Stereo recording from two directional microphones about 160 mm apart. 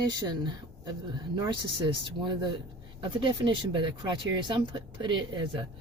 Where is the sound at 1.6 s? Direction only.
30° right (ahead or behind).